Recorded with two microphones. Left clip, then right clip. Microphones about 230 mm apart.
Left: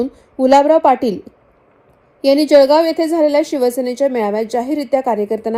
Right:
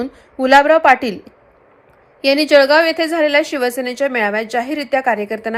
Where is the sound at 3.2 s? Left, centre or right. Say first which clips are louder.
Even; right.